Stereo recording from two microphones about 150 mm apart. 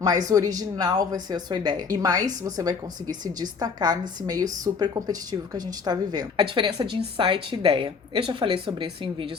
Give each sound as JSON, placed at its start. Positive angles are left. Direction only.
{"t": 0.0, "sound": "a woman's voice", "side_deg": -25}